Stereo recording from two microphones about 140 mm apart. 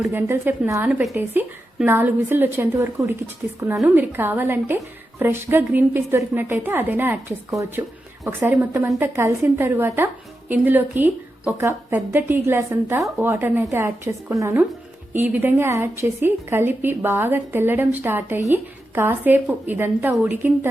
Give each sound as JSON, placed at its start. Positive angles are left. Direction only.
{"t": 0.1, "sound": "a woman's voice", "side_deg": -15}